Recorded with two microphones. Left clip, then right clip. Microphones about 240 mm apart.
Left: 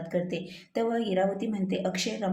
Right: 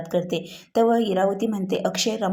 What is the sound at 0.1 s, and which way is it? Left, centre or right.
A woman's voice, right.